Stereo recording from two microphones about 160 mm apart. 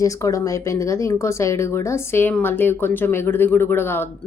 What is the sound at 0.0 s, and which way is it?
Speech, 20° left (ahead or behind).